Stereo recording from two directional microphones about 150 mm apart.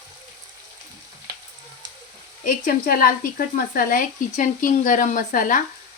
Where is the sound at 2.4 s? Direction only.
65° left (ahead or behind).